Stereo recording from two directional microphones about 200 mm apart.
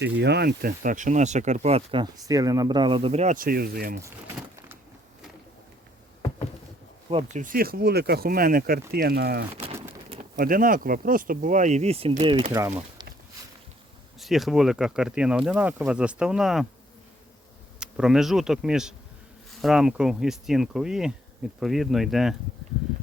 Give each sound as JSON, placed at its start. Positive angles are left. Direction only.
{"t": 0.0, "sound": "speech", "side_deg": -60}
{"t": 7.3, "sound": "speech", "side_deg": -45}
{"t": 10.1, "sound": "pigeon", "side_deg": -35}
{"t": 10.4, "sound": "speech", "side_deg": -45}
{"t": 14.2, "sound": "speech", "side_deg": 0}
{"t": 17.7, "sound": "speech", "side_deg": -5}